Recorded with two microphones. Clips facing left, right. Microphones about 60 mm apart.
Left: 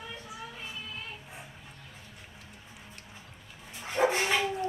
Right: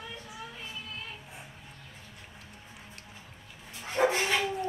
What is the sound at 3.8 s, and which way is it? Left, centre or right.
Dog, centre.